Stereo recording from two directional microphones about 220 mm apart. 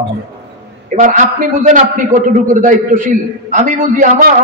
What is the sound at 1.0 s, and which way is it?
A man's voice, 35° right (ahead or behind).